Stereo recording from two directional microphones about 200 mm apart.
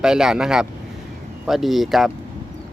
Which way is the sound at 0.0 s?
5° right (ahead or behind).